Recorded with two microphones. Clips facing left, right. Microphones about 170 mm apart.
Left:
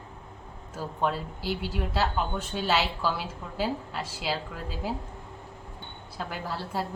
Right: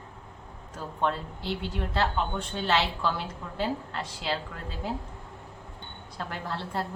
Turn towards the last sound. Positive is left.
turn(degrees=5)  # may be behind; listen again after turning